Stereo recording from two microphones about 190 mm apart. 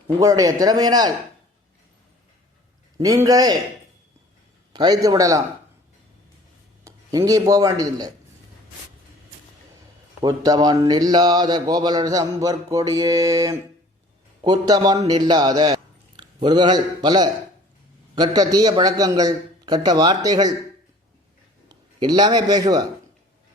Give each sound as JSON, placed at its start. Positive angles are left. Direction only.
{"t": 0.2, "sound": "speech", "side_deg": -15}
{"t": 3.0, "sound": "speech", "side_deg": -20}
{"t": 4.7, "sound": "a man's voice", "side_deg": -20}
{"t": 6.8, "sound": "speech", "side_deg": -15}
{"t": 10.2, "sound": "a man's voice", "side_deg": -20}
{"t": 21.7, "sound": "a man's voice", "side_deg": -20}